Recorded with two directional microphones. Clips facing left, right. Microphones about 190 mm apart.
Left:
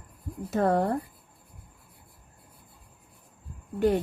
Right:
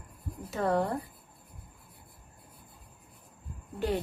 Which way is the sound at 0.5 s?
50° left (ahead or behind).